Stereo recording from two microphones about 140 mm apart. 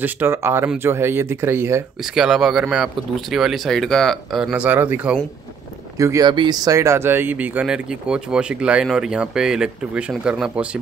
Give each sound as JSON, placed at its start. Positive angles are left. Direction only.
{"t": 0.0, "sound": "speech", "side_deg": -15}
{"t": 2.1, "sound": "speech", "side_deg": -5}
{"t": 5.9, "sound": "speech", "side_deg": -25}